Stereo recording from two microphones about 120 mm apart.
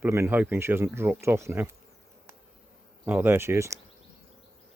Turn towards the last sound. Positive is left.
turn(degrees=-20)  # may be behind; listen again after turning